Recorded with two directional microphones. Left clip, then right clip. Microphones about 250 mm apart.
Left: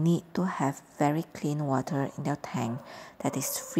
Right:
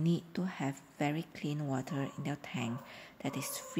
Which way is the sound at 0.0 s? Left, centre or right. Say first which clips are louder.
Left 7 dB; centre.